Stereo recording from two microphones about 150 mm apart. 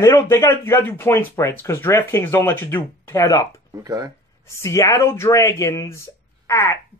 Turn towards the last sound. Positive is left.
turn(degrees=20)  # may be behind; listen again after turning